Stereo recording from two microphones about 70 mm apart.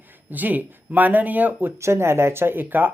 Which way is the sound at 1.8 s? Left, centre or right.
Right.